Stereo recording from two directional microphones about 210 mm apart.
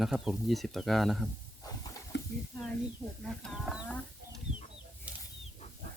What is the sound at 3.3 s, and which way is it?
Livestock, centre (ahead or behind).